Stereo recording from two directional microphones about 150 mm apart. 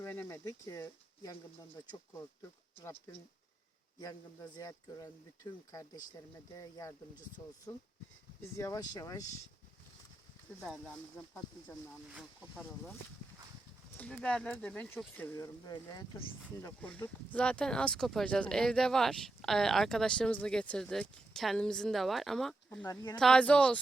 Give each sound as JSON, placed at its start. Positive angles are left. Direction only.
{"t": 0.0, "sound": "speech", "side_deg": 15}
{"t": 4.0, "sound": "speech", "side_deg": 25}
{"t": 10.6, "sound": "speech", "side_deg": 5}
{"t": 12.5, "sound": "speech", "side_deg": 10}
{"t": 16.6, "sound": "speech", "side_deg": 10}
{"t": 22.9, "sound": "speech", "side_deg": 25}
{"t": 23.1, "sound": "speech", "side_deg": 5}